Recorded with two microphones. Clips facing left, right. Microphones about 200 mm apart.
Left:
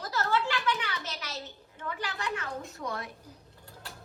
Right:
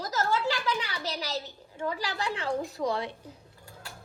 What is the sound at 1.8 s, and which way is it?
A woman's voice, 35° right (ahead or behind).